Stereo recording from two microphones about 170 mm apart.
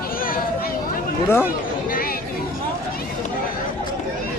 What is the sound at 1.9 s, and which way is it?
Chatter, 55° left (ahead or behind).